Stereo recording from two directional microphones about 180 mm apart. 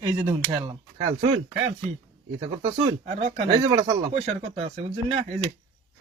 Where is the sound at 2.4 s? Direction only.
35° right (ahead or behind).